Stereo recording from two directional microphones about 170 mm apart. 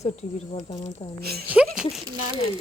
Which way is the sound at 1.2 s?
65° right (ahead or behind).